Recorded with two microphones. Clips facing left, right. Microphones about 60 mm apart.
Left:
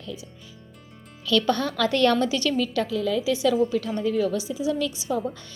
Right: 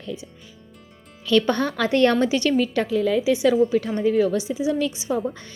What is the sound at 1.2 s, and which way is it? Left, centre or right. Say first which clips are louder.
Speech: right 3 dB; right.